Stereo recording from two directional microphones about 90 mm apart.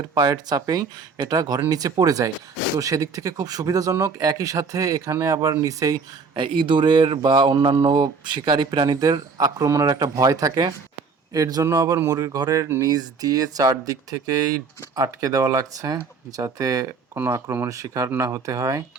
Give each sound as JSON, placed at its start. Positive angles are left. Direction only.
{"t": 0.1, "sound": "speech", "side_deg": -45}
{"t": 6.3, "sound": "speech", "side_deg": -70}